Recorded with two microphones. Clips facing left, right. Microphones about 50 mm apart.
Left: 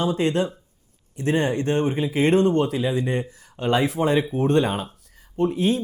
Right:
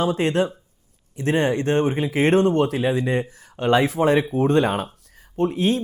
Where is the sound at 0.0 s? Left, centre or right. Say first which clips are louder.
Right 1 dB; right.